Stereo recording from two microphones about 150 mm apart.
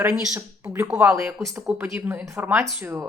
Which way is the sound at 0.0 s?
15° right (ahead or behind).